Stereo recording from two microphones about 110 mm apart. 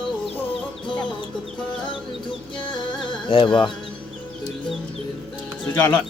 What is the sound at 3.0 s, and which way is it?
Speech, 50° left (ahead or behind).